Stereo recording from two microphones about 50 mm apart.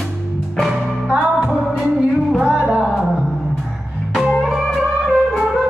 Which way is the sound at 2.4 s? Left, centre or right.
Right.